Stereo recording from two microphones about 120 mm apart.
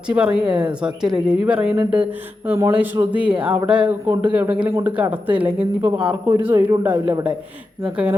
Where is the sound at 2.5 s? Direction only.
25° right (ahead or behind).